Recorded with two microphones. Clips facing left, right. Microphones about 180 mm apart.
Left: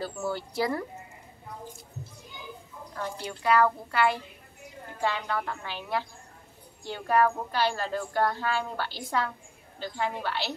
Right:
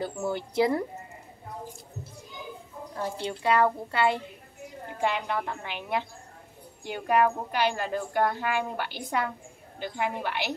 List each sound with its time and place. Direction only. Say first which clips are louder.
0.0 s a woman's voice: right 2 dB; 20° right (ahead or behind)
2.9 s a woman's voice: right 3 dB; 25° right (ahead or behind)